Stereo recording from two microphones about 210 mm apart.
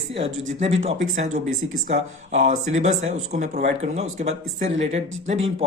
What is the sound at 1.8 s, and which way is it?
Speech, 35° right (ahead or behind).